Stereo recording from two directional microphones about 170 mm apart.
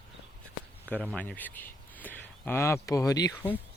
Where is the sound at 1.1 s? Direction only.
10° left (ahead or behind).